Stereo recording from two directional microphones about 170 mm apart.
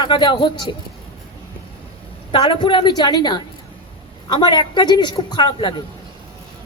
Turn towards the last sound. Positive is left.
turn(degrees=25)  # may be behind; listen again after turning